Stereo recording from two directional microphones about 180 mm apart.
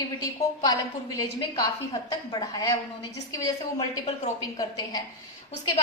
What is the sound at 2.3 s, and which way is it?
Speech, 20° left (ahead or behind).